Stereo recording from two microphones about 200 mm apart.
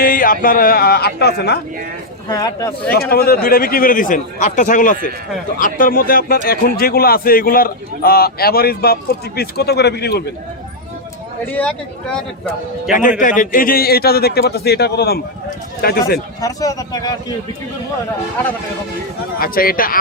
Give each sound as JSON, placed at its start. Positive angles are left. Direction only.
{"t": 0.0, "sound": "a man's voice", "side_deg": 45}
{"t": 2.3, "sound": "speech", "side_deg": 15}
{"t": 2.9, "sound": "a man's voice", "side_deg": 50}
{"t": 11.5, "sound": "speech", "side_deg": 5}
{"t": 12.9, "sound": "a man's voice", "side_deg": 40}
{"t": 16.4, "sound": "speech", "side_deg": 15}
{"t": 19.4, "sound": "a man's voice", "side_deg": 45}